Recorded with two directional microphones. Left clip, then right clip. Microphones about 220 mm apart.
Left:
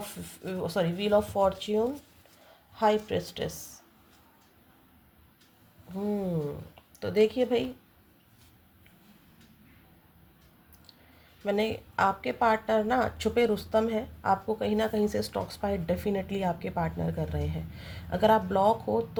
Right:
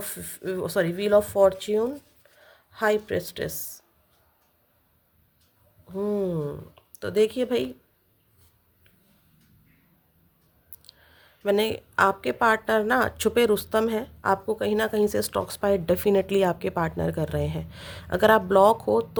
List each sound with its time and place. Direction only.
0.0 s speech: 40° right (ahead or behind)
7.0 s speech: 30° right (ahead or behind)
10.9 s clicking: 40° right (ahead or behind)
11.4 s a woman's voice: 40° right (ahead or behind)